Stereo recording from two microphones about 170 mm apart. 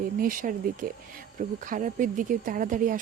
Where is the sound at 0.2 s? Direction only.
55° right (ahead or behind).